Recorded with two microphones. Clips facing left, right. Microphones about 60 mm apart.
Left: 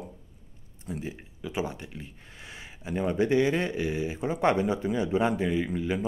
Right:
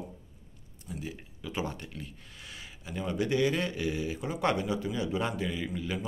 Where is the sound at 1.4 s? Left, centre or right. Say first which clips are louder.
Left 3 dB; centre.